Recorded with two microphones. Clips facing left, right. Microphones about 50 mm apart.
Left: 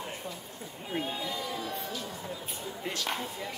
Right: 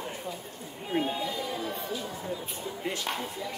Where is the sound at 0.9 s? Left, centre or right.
Centre.